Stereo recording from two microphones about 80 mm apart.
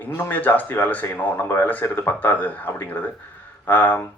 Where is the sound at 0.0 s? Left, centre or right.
Left.